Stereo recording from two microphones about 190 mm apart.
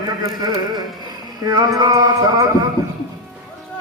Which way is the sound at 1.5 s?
20° right (ahead or behind).